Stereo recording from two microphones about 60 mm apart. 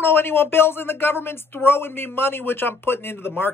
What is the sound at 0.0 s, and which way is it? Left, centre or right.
Speech, left.